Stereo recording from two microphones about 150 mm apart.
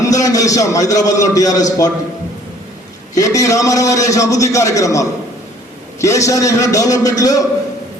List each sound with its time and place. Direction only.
0.0 s a man's voice: 20° left (ahead or behind)
3.2 s a man's voice: 20° left (ahead or behind)